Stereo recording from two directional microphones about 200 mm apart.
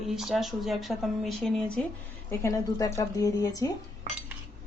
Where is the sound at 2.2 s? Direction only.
15° left (ahead or behind).